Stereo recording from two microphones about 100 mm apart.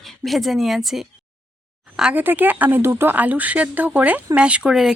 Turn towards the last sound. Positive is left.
turn(degrees=-5)  # may be behind; listen again after turning